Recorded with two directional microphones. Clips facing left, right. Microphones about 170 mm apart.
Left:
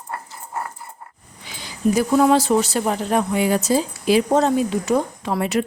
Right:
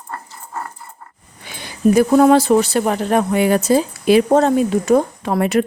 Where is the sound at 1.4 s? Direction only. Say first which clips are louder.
Right 5 dB; 60° right (ahead or behind).